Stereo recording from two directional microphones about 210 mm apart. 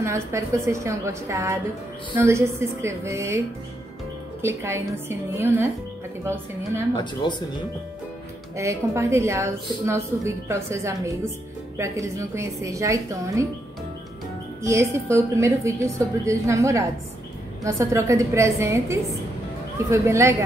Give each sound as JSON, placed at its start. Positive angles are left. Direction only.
{"t": 0.0, "sound": "a woman's voice", "side_deg": -15}
{"t": 4.4, "sound": "a woman's voice", "side_deg": -10}
{"t": 7.0, "sound": "speech", "side_deg": 20}
{"t": 8.5, "sound": "a woman's voice", "side_deg": -15}
{"t": 14.6, "sound": "a woman's voice", "side_deg": -15}